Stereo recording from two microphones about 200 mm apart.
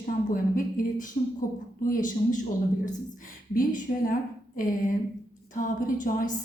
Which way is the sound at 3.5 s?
45° left (ahead or behind).